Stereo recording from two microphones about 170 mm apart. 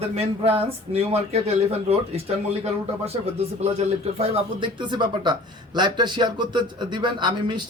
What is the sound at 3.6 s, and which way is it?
Speech, 40° right (ahead or behind).